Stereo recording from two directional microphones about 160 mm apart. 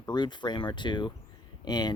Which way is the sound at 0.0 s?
25° left (ahead or behind).